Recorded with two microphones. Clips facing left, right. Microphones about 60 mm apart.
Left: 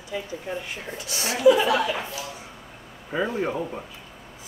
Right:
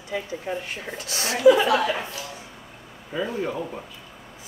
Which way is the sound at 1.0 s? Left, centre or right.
Right.